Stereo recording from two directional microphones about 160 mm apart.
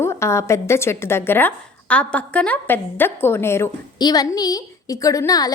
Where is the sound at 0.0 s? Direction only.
15° left (ahead or behind).